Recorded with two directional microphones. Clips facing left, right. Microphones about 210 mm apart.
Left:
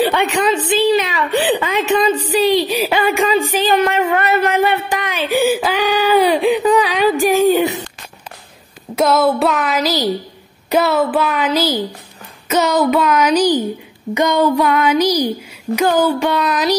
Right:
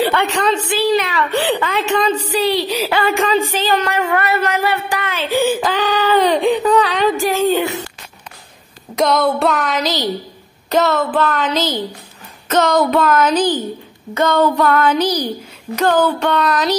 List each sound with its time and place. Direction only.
0.0 s a woman's voice: 15° left (ahead or behind)
3.9 s a sound: 25° left (ahead or behind)
8.9 s a woman's voice: 5° left (ahead or behind)